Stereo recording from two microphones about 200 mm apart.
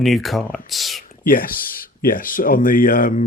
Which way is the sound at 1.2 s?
45° left (ahead or behind).